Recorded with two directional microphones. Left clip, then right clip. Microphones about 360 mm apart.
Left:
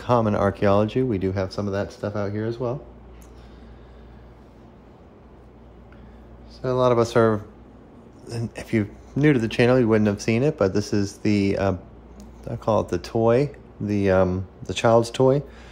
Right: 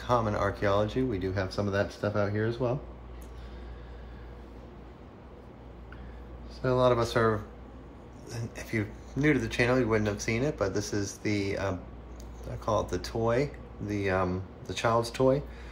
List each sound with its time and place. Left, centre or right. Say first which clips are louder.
0.0 s speech: left 7 dB; centre
6.6 s speech: left 5 dB; centre
8.7 s speech: left 8 dB; left